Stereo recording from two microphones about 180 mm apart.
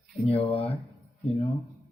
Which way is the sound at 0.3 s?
35° left (ahead or behind).